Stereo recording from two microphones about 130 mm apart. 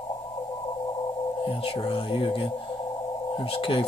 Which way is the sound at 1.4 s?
45° left (ahead or behind).